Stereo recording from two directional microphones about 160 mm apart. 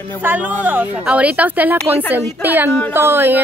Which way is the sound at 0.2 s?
10° right (ahead or behind).